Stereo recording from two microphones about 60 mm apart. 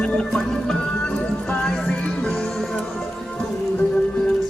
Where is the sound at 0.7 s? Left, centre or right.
Centre.